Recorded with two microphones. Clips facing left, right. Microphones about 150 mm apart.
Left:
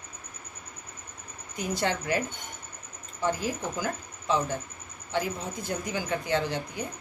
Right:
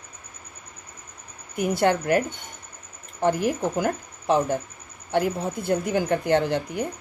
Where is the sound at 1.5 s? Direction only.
60° right (ahead or behind).